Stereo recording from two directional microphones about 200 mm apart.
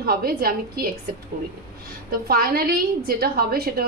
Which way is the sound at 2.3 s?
50° right (ahead or behind).